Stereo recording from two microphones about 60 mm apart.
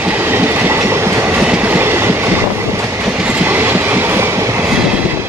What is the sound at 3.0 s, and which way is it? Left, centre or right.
Train, right.